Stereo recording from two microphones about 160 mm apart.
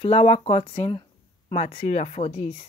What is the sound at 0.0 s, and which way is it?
Speech, 40° left (ahead or behind).